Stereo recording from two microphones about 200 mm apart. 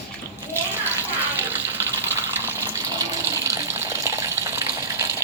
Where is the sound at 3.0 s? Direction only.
15° right (ahead or behind).